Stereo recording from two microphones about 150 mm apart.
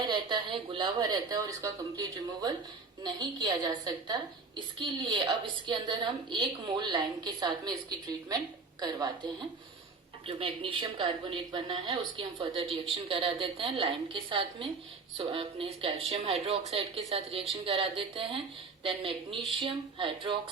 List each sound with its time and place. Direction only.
0.0 s a woman's voice: 30° right (ahead or behind)
10.2 s speech: 40° right (ahead or behind)